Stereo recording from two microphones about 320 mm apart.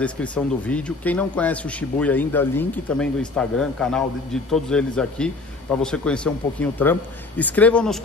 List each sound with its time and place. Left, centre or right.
0.0 s speech: centre